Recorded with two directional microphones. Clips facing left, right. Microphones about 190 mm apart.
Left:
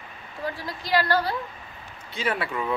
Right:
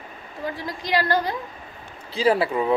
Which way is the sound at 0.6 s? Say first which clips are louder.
Right 1 dB; 20° right (ahead or behind).